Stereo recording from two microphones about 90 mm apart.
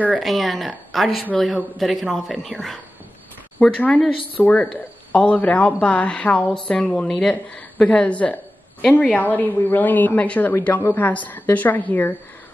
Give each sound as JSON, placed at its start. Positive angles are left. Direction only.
{"t": 0.1, "sound": "speech", "side_deg": 0}
{"t": 3.5, "sound": "a woman's voice", "side_deg": 15}